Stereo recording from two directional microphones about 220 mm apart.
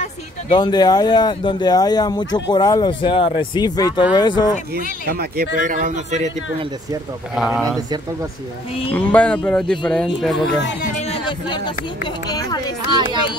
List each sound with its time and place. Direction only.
0.0 s speech: 20° left (ahead or behind)
5.0 s speech: 45° right (ahead or behind)
7.3 s speech: 5° right (ahead or behind)
8.9 s speech: 5° left (ahead or behind)
11.0 s music: 25° left (ahead or behind)
12.3 s speech: 15° left (ahead or behind)